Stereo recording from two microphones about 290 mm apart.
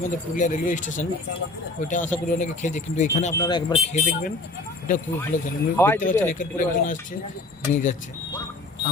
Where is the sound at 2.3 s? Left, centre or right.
Left.